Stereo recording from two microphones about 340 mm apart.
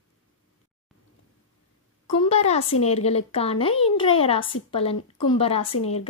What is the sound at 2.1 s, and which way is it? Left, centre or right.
A woman's voice, centre.